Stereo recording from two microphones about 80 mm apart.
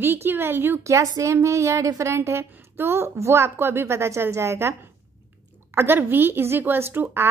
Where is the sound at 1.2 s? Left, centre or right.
Right.